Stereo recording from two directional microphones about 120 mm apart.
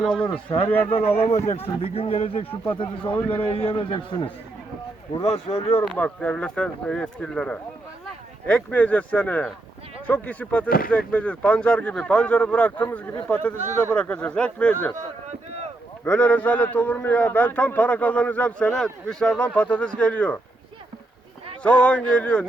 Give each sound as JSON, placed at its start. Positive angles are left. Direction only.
{"t": 0.0, "sound": "speech", "side_deg": 5}
{"t": 0.9, "sound": "a man's voice", "side_deg": 60}
{"t": 5.1, "sound": "a man's voice", "side_deg": 55}
{"t": 5.8, "sound": "speech", "side_deg": 10}
{"t": 16.0, "sound": "speech", "side_deg": 10}
{"t": 21.6, "sound": "speech", "side_deg": 10}